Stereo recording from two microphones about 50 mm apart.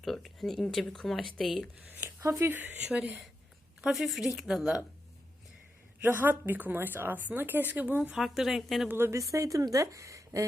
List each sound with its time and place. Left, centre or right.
0.0 s speech: centre
1.9 s a woman's voice: right
2.8 s speech: right
3.8 s speech: centre
6.0 s a woman's voice: right
8.1 s speech: centre
9.0 s speech: right